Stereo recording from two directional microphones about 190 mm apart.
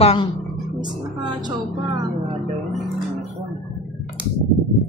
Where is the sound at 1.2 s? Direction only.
25° right (ahead or behind).